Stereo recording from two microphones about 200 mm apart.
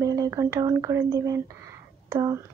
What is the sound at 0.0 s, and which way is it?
Speech, 15° right (ahead or behind).